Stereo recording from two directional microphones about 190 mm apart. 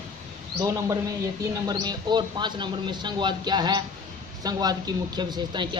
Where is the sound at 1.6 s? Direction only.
20° right (ahead or behind).